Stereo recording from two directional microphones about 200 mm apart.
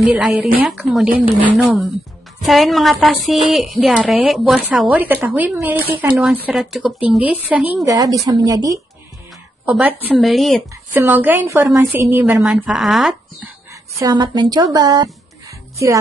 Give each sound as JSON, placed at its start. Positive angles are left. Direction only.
{"t": 0.1, "sound": "a woman's voice", "side_deg": -5}
{"t": 13.9, "sound": "a woman's voice", "side_deg": -20}